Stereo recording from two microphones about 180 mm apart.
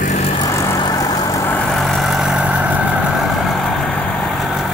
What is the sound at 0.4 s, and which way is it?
Vehicle, 15° left (ahead or behind).